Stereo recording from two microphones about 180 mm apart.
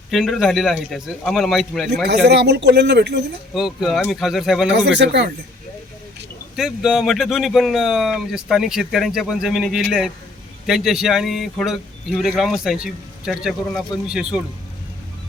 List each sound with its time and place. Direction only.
0.1 s speech: centre (ahead or behind)
2.2 s speech: 70° right (ahead or behind)
3.5 s speech: centre (ahead or behind)
4.7 s speech: 75° right (ahead or behind)
6.6 s speech: 5° right (ahead or behind)